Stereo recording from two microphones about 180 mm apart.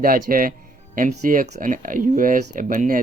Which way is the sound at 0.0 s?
50° right (ahead or behind).